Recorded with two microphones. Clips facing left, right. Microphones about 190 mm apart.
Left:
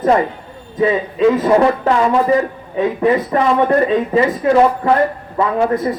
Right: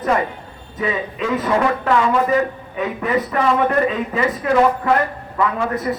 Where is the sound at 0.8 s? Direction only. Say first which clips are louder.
Left 8 dB; 30° left (ahead or behind).